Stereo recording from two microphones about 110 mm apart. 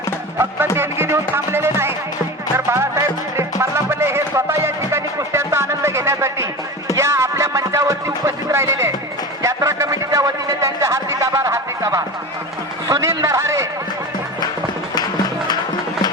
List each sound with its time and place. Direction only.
0.8 s speech: 20° right (ahead or behind)
2.6 s music: 25° right (ahead or behind)
9.4 s a sound: 30° right (ahead or behind)